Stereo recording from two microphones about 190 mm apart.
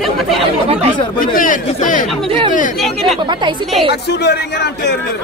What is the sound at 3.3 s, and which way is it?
Speech, 25° right (ahead or behind).